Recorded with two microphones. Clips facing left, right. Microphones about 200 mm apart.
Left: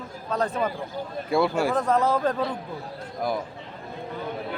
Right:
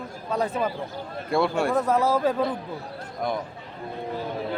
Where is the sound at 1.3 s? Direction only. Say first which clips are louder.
Even; centre (ahead or behind).